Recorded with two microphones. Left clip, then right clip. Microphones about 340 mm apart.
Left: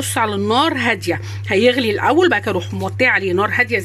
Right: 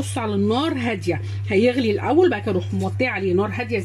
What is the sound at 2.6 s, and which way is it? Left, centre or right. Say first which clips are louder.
Speech: left 3 dB; left.